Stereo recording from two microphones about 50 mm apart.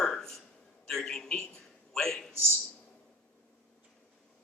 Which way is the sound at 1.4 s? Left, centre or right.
Centre.